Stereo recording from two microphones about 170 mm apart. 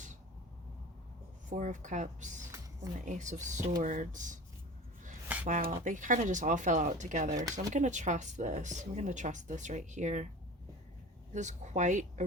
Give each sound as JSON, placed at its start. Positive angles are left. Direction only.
{"t": 1.5, "sound": "speech", "side_deg": -45}
{"t": 5.5, "sound": "speech", "side_deg": -45}
{"t": 11.3, "sound": "speech", "side_deg": -45}